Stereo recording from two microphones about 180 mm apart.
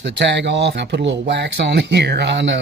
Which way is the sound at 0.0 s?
75° right (ahead or behind).